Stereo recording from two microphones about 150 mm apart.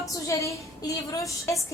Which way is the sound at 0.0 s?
20° left (ahead or behind).